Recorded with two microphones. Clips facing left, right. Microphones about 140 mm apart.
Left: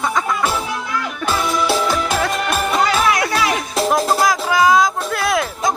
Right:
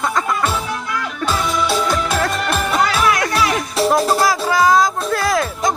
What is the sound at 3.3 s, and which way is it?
Music, 20° left (ahead or behind).